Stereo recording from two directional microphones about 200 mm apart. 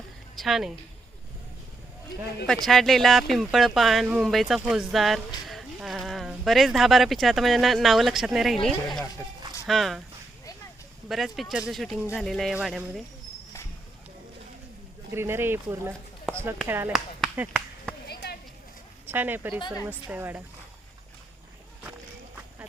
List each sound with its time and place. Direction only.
0.3 s speech: centre (ahead or behind)
2.6 s speech: centre (ahead or behind)
11.1 s speech: centre (ahead or behind)
15.1 s speech: 10° right (ahead or behind)
18.1 s a sound: 55° left (ahead or behind)
19.0 s speech: 10° right (ahead or behind)
19.5 s speech: 20° left (ahead or behind)
19.9 s speech: 10° right (ahead or behind)